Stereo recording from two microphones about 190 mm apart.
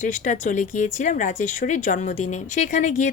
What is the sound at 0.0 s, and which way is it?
A woman's voice, 40° left (ahead or behind).